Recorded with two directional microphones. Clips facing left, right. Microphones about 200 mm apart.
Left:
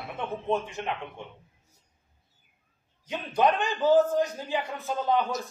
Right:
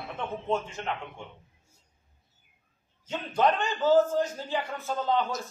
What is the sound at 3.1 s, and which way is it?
Speech, 15° left (ahead or behind).